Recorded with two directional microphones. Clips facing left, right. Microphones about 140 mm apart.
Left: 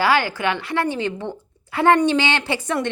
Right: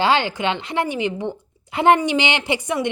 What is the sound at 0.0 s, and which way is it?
A woman's voice, 20° right (ahead or behind).